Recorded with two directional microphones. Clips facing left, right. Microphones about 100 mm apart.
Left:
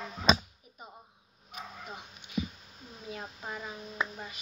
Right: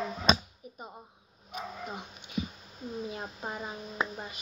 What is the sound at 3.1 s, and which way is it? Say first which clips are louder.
Speech: right 2 dB; 30° right (ahead or behind).